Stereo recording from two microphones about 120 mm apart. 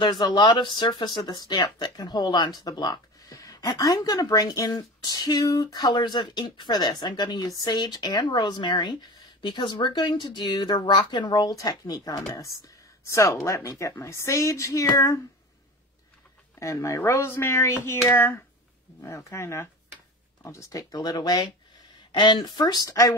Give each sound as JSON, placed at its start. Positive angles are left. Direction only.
{"t": 0.0, "sound": "speech", "side_deg": 35}
{"t": 16.5, "sound": "speech", "side_deg": 25}